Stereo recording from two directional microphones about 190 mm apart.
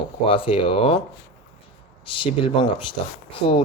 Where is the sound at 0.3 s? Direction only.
30° left (ahead or behind).